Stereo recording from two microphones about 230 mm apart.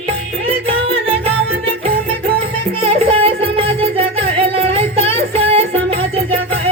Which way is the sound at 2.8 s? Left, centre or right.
Right.